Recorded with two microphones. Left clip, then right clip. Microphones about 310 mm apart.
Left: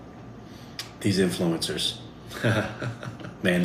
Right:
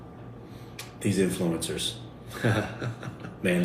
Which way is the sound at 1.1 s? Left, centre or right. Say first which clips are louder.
Left 2 dB; left.